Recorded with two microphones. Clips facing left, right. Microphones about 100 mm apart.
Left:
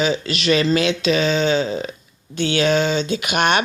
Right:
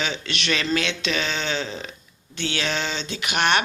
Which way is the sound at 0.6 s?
40° left (ahead or behind).